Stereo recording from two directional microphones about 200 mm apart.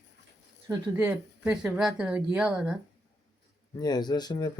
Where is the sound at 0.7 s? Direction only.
10° right (ahead or behind).